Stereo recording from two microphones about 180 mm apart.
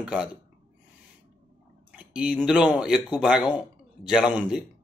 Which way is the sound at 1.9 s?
5° right (ahead or behind).